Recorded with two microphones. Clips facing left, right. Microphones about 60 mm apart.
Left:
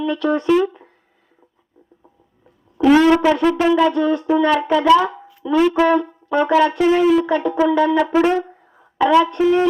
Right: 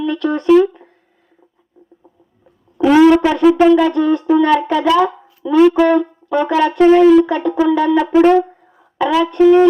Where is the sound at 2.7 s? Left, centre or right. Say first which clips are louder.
Right 3 dB; centre.